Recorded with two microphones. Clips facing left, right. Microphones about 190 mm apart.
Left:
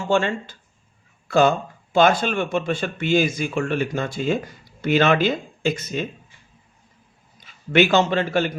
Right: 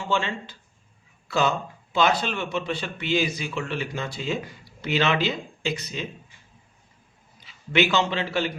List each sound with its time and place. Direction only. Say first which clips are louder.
0.0 s speech: left 6 dB; 45° left (ahead or behind)
7.4 s a man's voice: left 5 dB; 50° left (ahead or behind)